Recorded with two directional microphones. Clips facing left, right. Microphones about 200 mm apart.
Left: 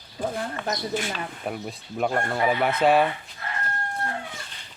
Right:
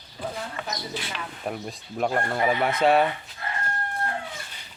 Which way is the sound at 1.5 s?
Centre (ahead or behind).